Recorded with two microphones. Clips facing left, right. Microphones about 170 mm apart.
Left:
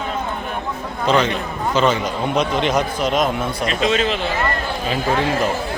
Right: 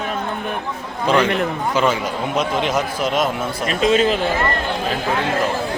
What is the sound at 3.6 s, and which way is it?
Speech, 45° right (ahead or behind).